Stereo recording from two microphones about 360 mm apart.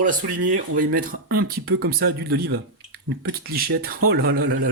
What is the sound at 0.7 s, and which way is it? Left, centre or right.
A man's voice, right.